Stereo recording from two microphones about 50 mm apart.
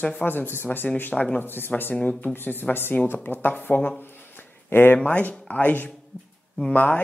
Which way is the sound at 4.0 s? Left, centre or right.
Left.